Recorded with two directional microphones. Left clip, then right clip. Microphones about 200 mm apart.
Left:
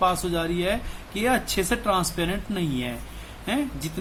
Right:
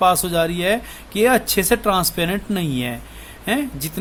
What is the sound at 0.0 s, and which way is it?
A man's voice, 45° right (ahead or behind).